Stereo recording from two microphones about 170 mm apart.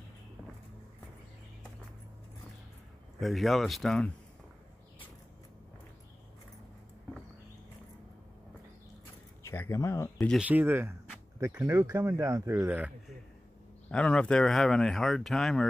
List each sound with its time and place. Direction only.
3.2 s speech: centre (ahead or behind)
9.4 s speech: 15° left (ahead or behind)
10.1 s speech: centre (ahead or behind)
10.5 s speech: 10° right (ahead or behind)
13.8 s speech: 5° left (ahead or behind)